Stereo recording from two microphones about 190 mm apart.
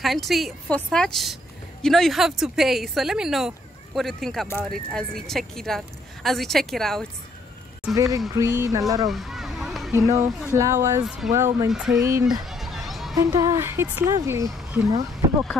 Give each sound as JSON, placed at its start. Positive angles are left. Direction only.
{"t": 0.0, "sound": "a woman's voice", "side_deg": 0}
{"t": 7.9, "sound": "a woman's voice", "side_deg": -20}
{"t": 9.1, "sound": "a sound", "side_deg": 0}
{"t": 9.9, "sound": "a woman's voice", "side_deg": -15}
{"t": 11.7, "sound": "a woman's voice", "side_deg": -5}
{"t": 12.0, "sound": "a woman's voice", "side_deg": -15}
{"t": 12.4, "sound": "a sound", "side_deg": 0}
{"t": 13.1, "sound": "a woman's voice", "side_deg": -15}